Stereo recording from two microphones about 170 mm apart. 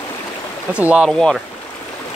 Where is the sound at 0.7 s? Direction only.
5° right (ahead or behind).